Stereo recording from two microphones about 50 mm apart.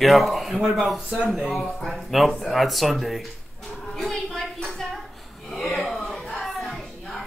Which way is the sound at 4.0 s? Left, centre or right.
Centre.